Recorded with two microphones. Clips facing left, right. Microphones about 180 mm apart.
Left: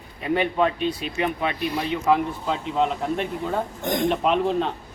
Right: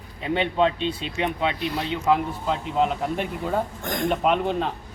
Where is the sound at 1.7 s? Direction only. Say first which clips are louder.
Left 3 dB; centre (ahead or behind).